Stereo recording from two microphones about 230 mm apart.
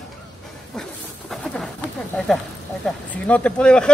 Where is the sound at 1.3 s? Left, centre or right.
Centre.